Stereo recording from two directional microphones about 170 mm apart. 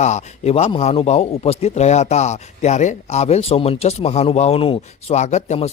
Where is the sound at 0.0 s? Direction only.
40° left (ahead or behind).